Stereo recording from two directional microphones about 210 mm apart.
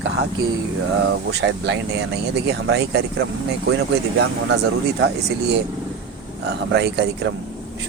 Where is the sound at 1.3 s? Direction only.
55° right (ahead or behind).